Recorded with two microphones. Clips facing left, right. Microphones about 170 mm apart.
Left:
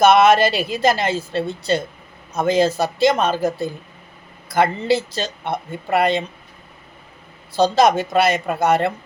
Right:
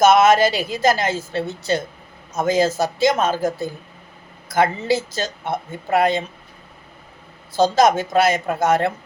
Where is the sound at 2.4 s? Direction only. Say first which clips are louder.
Left 1 dB; 60° left (ahead or behind).